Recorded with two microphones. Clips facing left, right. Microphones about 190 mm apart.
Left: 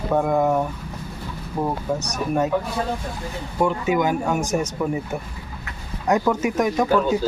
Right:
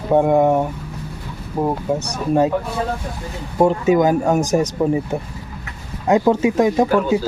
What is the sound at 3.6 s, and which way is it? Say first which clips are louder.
Speech: right 6 dB; 35° right (ahead or behind).